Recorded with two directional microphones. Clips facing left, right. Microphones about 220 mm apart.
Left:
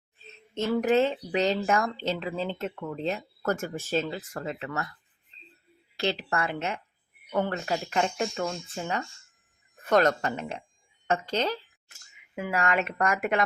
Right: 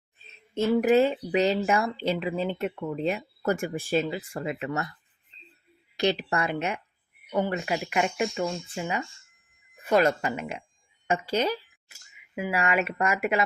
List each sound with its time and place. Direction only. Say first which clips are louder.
0.3 s speech: right 4 dB; 10° right (ahead or behind)
6.0 s speech: right 3 dB; 15° right (ahead or behind)
8.4 s speech: right 2 dB; centre (ahead or behind)
8.7 s speech: right 1 dB; 15° right (ahead or behind)